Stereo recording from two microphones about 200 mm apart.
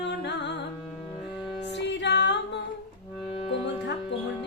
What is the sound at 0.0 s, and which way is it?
Music, 55° left (ahead or behind).